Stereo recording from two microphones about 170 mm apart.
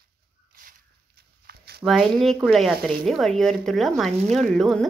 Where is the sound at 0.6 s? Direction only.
50° right (ahead or behind).